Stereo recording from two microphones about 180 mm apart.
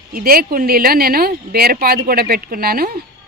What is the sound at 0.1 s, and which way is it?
Speech, 55° right (ahead or behind).